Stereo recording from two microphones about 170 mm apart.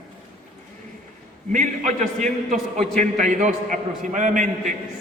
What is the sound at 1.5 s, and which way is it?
Speech, 50° right (ahead or behind).